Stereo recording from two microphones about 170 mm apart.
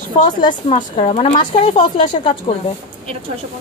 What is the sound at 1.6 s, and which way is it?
Speech, 30° left (ahead or behind).